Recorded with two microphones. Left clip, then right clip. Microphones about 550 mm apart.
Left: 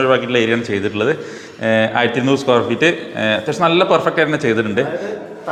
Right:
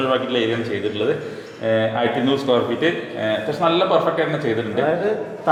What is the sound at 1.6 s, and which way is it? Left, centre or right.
A man's voice, left.